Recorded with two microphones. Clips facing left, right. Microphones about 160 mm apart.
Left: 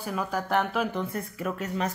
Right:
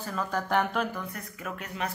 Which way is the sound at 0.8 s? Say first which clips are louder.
Left 6 dB; 25° left (ahead or behind).